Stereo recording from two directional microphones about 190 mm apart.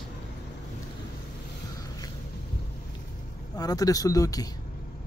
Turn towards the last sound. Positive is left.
turn(degrees=20)  # may be behind; listen again after turning